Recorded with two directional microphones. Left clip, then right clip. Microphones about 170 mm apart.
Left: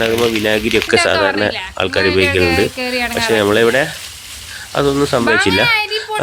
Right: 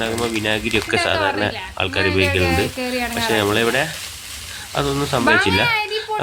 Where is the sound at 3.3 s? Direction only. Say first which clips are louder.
Left 6 dB; 35° left (ahead or behind).